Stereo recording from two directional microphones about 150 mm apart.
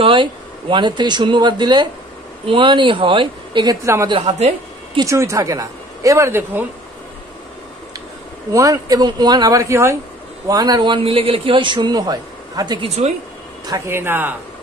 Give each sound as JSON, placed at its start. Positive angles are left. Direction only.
{"t": 0.0, "sound": "a man's voice", "side_deg": -35}
{"t": 3.8, "sound": "a woman's voice", "side_deg": -20}
{"t": 4.3, "sound": "a woman's voice", "side_deg": -50}
{"t": 5.0, "sound": "a woman's voice", "side_deg": -20}
{"t": 8.5, "sound": "a woman's voice", "side_deg": -25}
{"t": 12.8, "sound": "a woman's voice", "side_deg": -45}
{"t": 13.7, "sound": "speech", "side_deg": -20}